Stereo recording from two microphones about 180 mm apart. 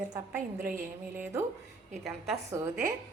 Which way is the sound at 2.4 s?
15° right (ahead or behind).